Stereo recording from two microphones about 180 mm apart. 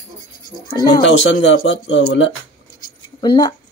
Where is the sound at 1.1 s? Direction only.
75° left (ahead or behind).